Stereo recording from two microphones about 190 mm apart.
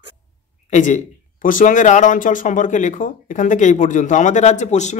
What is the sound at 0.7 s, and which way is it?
Speech, 40° left (ahead or behind).